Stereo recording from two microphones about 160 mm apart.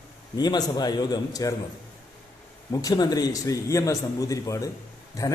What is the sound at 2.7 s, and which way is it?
A man's voice, 25° left (ahead or behind).